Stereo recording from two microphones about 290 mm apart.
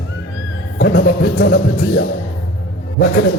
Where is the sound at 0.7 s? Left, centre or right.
Left.